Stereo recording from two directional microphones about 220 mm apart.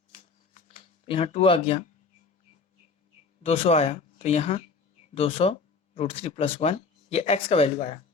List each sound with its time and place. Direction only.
0.2 s shuffling cards: 30° left (ahead or behind)
3.4 s speech: 25° left (ahead or behind)